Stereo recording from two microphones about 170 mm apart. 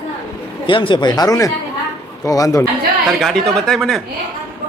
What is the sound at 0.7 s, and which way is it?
Speech, 30° left (ahead or behind).